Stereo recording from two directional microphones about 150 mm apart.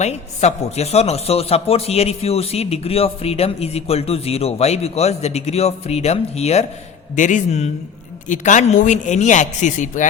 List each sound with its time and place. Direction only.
0.0 s a man's voice: 45° left (ahead or behind)
7.2 s a man's voice: 55° left (ahead or behind)